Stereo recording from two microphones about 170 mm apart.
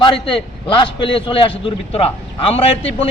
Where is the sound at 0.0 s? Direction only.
30° left (ahead or behind).